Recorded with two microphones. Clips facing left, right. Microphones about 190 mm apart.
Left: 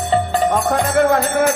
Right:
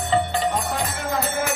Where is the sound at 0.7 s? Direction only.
60° left (ahead or behind).